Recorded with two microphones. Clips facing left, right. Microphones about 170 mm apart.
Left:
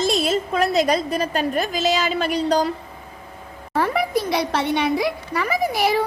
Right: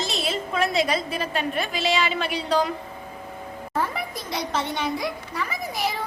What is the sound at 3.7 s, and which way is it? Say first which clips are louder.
A child's voice: left 8 dB; 70° left (ahead or behind).